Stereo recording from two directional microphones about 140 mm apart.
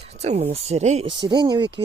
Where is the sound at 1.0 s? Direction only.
35° right (ahead or behind).